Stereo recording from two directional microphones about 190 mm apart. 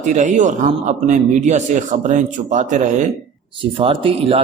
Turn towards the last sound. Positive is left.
turn(degrees=-30)  # may be behind; listen again after turning